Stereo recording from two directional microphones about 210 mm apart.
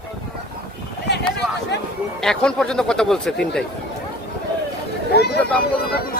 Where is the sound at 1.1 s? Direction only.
55° left (ahead or behind).